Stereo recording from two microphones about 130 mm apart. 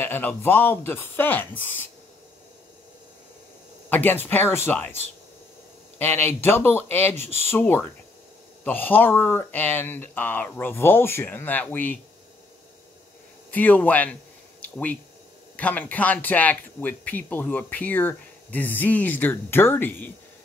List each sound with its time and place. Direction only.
0.0 s speech: 15° left (ahead or behind)
3.9 s speech: 15° left (ahead or behind)
13.5 s speech: 10° left (ahead or behind)
14.6 s a sound: 10° left (ahead or behind)
15.5 s speech: 10° left (ahead or behind)